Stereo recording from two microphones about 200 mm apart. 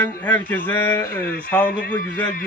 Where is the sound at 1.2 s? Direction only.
50° left (ahead or behind).